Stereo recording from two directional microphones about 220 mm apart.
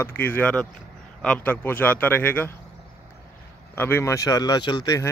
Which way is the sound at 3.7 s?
10° left (ahead or behind).